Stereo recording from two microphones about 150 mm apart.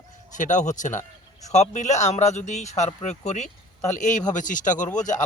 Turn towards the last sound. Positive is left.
turn(degrees=55)  # may be behind; listen again after turning